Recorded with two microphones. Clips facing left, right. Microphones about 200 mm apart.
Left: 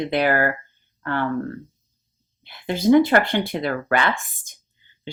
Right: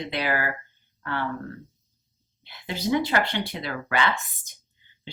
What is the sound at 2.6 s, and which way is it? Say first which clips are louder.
Speech: left 9 dB; 50° left (ahead or behind).